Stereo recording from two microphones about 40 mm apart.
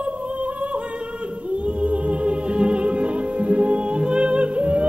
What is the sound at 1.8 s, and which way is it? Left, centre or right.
Music, right.